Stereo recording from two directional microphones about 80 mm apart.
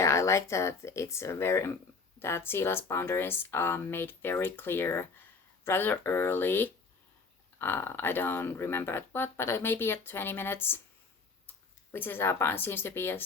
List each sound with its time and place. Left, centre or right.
0.0 s speech: left